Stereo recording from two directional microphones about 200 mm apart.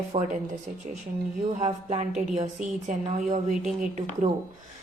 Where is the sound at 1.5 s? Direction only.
35° right (ahead or behind).